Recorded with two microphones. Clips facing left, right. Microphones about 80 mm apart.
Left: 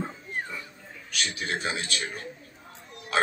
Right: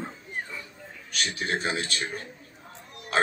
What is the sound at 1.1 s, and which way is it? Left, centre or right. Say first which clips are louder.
Speech: right 2 dB; right.